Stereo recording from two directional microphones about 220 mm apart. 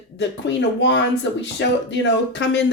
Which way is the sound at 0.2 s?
55° left (ahead or behind).